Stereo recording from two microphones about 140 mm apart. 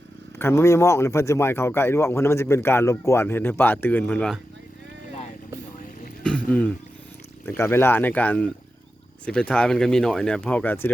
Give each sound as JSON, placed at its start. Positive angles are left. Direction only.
{"t": 0.3, "sound": "speech", "side_deg": 20}
{"t": 6.2, "sound": "a sound", "side_deg": 10}
{"t": 7.4, "sound": "speech", "side_deg": 15}